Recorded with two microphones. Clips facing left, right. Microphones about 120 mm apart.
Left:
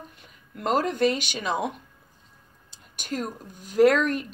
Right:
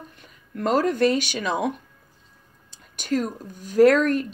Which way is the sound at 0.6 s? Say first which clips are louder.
Right 3 dB; 45° right (ahead or behind).